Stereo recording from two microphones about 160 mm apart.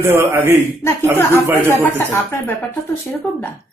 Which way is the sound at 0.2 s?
15° right (ahead or behind).